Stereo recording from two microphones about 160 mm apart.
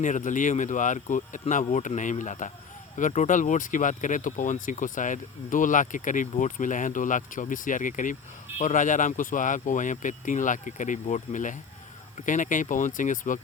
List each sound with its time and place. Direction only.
0.0 s speech: 55° left (ahead or behind)